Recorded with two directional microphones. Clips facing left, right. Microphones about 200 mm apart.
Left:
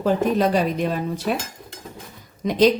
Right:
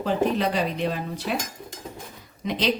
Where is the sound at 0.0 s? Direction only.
45° left (ahead or behind).